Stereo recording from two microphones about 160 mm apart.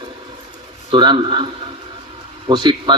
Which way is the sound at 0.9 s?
30° right (ahead or behind).